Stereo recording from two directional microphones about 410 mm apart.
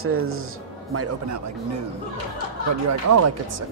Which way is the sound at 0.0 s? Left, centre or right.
Right.